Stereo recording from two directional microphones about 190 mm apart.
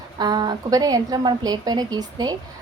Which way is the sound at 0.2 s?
20° right (ahead or behind).